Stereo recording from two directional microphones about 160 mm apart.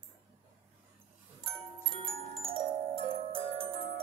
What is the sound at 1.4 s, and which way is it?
Music, 35° right (ahead or behind).